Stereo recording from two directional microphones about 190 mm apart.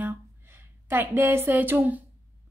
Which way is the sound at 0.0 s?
10° right (ahead or behind).